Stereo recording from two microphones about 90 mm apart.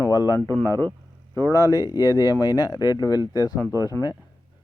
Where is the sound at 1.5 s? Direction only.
45° left (ahead or behind).